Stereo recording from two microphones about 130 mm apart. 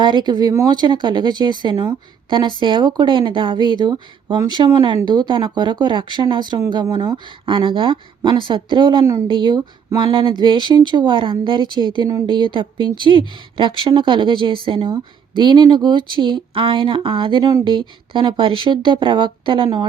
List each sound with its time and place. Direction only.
0.0 s speech: 35° right (ahead or behind)